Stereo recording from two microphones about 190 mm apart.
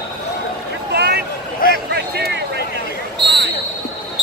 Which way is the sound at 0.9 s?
60° right (ahead or behind).